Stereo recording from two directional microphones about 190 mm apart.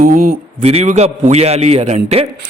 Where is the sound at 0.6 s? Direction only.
35° right (ahead or behind).